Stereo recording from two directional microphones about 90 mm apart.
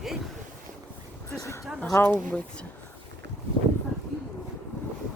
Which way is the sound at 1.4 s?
35° left (ahead or behind).